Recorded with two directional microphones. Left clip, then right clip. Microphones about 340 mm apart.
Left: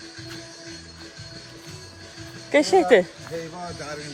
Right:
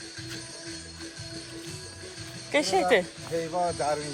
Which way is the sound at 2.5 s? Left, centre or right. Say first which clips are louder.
Left 6 dB; centre.